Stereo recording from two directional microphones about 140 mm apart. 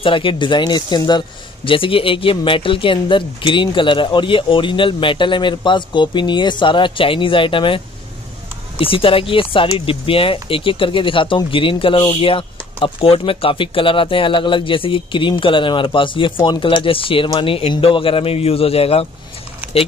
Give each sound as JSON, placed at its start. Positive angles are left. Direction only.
{"t": 0.0, "sound": "a man's voice", "side_deg": 40}